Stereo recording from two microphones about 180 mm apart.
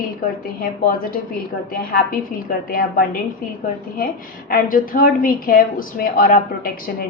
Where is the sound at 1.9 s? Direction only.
55° left (ahead or behind).